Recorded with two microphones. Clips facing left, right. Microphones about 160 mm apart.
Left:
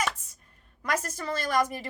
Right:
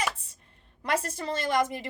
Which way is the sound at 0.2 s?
30° right (ahead or behind).